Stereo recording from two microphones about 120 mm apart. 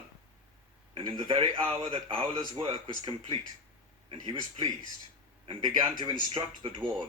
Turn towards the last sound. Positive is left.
turn(degrees=-40)  # may be behind; listen again after turning